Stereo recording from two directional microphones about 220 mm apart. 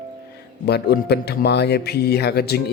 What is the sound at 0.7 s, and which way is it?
Speech, 45° left (ahead or behind).